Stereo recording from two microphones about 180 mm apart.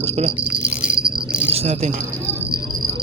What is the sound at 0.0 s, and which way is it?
Speech, 35° right (ahead or behind).